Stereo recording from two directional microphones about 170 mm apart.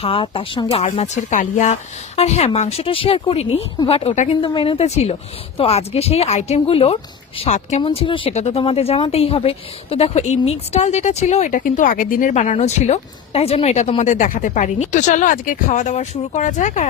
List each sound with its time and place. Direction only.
0.0 s speech: 30° left (ahead or behind)
4.4 s speech: 30° left (ahead or behind); by 12.3 s 55° left (ahead or behind)
12.3 s speech: 40° left (ahead or behind)